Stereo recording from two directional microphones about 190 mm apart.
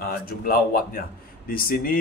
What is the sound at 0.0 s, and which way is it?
Speech, 50° left (ahead or behind).